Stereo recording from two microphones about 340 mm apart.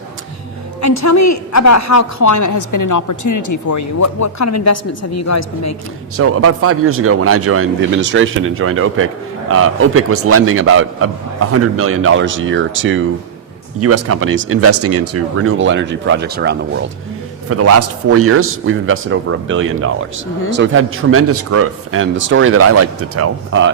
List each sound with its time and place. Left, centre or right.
0.8 s a woman's voice: left
6.1 s a man's voice: right
17.5 s a man's voice: right